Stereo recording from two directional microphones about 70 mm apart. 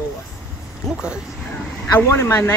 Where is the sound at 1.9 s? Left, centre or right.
Left.